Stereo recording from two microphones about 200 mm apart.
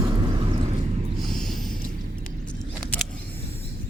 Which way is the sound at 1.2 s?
Centre (ahead or behind).